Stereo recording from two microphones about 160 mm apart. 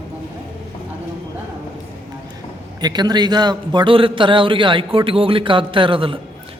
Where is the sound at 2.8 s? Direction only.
25° right (ahead or behind).